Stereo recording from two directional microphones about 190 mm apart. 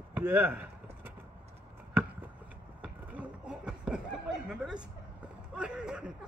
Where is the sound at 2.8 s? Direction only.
5° right (ahead or behind).